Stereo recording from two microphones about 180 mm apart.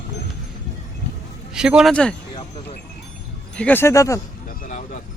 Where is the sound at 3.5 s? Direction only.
10° left (ahead or behind).